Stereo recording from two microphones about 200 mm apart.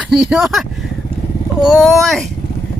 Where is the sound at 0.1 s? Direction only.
5° right (ahead or behind).